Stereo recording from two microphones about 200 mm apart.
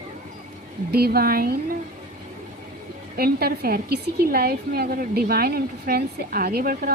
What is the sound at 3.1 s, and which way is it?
A woman's voice, 50° right (ahead or behind).